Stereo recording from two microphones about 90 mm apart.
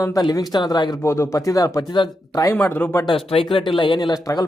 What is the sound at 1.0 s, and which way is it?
Speech, 30° left (ahead or behind).